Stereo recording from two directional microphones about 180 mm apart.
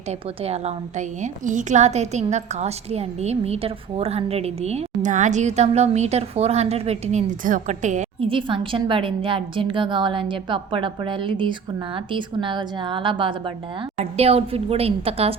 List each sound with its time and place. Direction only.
0.1 s a woman's voice: 35° right (ahead or behind)
8.3 s a woman's voice: 30° right (ahead or behind)